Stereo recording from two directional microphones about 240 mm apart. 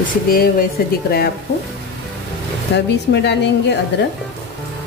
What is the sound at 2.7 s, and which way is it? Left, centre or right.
Speech, left.